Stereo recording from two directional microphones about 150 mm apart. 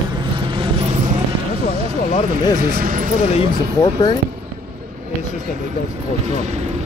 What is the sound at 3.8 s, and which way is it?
Speech, 25° left (ahead or behind).